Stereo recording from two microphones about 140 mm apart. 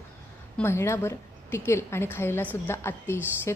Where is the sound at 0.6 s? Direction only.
20° left (ahead or behind).